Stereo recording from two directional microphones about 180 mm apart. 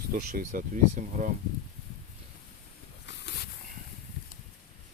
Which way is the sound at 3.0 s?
70° left (ahead or behind).